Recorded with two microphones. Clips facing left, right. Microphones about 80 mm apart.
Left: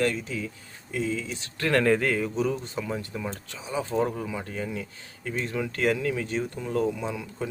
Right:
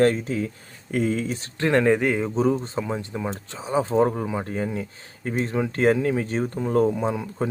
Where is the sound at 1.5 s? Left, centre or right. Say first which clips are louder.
Right 3 dB; right.